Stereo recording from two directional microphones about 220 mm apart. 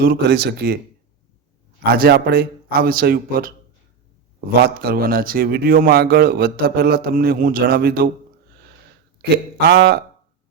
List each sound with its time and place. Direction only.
0.0 s a man's voice: 45° right (ahead or behind)
1.8 s a man's voice: 45° right (ahead or behind)
9.3 s a man's voice: 45° right (ahead or behind)